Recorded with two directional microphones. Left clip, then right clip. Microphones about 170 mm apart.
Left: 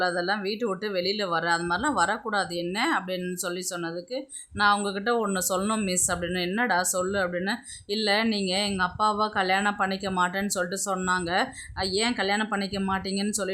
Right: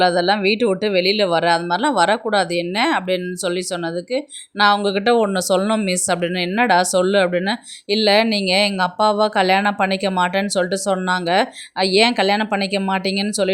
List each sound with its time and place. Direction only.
0.0 s speech: 30° right (ahead or behind)